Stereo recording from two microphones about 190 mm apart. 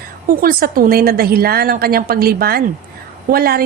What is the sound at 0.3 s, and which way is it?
A woman's voice, 50° right (ahead or behind).